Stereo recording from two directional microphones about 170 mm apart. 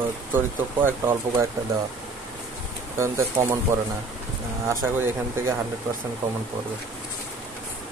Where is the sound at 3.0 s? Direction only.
15° right (ahead or behind).